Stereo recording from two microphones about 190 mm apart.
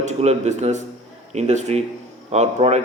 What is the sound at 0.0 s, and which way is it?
A man's voice, 35° right (ahead or behind).